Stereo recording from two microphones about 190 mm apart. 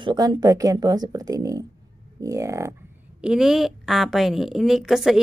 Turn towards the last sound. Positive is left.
turn(degrees=0)  # may be behind; listen again after turning